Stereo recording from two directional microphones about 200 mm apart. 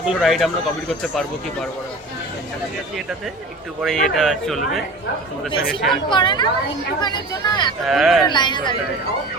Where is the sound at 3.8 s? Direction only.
Centre (ahead or behind).